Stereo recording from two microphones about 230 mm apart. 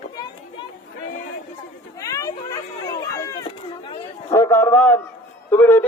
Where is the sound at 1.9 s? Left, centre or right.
Centre.